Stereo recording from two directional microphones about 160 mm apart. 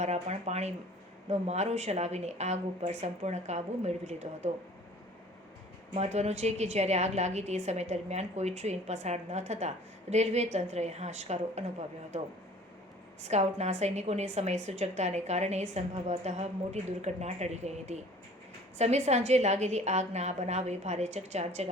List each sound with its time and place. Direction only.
0.0 s a woman's voice: 45° right (ahead or behind)
5.9 s a woman's voice: 45° right (ahead or behind)
13.2 s a woman's voice: 45° right (ahead or behind)